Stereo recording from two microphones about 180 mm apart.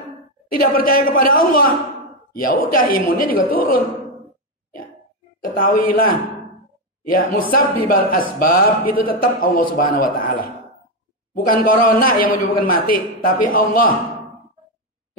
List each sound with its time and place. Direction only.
0.5 s a man's voice: 55° left (ahead or behind)
5.4 s a man's voice: 50° left (ahead or behind)
7.1 s a man's voice: 55° left (ahead or behind)
11.3 s a man's voice: 55° left (ahead or behind)